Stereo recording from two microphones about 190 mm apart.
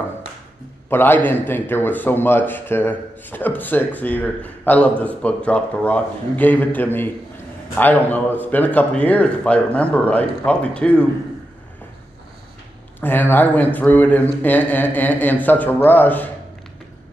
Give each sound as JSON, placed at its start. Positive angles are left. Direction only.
{"t": 0.8, "sound": "a man's voice", "side_deg": 10}
{"t": 13.0, "sound": "a man's voice", "side_deg": 10}